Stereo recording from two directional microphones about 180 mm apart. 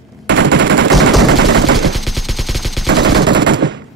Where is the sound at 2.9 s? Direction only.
70° right (ahead or behind); by 3.8 s 85° right.